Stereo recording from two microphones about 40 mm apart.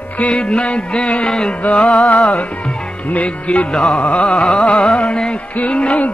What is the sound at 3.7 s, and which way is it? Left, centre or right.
Carnatic music, centre.